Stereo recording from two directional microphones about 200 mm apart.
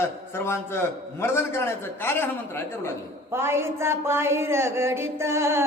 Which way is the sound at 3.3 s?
10° right (ahead or behind).